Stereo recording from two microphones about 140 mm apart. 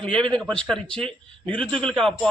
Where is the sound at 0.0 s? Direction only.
5° left (ahead or behind).